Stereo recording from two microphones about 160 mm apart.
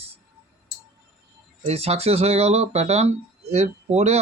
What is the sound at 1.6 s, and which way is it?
Speech, 40° right (ahead or behind).